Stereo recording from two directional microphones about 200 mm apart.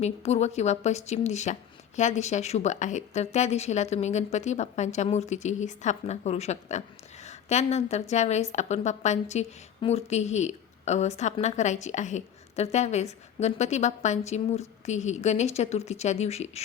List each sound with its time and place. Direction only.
0.0 s a woman's voice: 35° left (ahead or behind)